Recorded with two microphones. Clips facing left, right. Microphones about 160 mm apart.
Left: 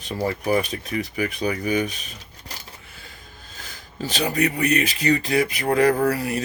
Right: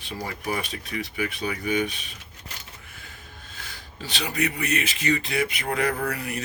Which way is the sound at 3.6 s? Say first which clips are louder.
Left 8 dB; 40° left (ahead or behind).